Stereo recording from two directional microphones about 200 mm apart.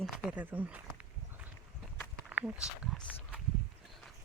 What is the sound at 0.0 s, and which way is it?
Speech, 5° right (ahead or behind).